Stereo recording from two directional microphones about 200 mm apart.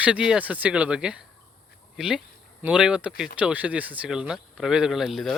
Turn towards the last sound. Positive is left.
turn(degrees=0)  # may be behind; listen again after turning